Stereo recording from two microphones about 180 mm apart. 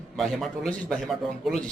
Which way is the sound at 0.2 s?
Centre (ahead or behind).